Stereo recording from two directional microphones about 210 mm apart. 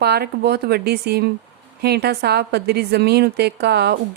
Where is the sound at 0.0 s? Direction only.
50° right (ahead or behind).